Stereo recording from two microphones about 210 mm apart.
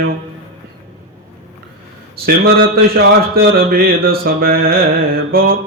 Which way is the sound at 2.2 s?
45° right (ahead or behind).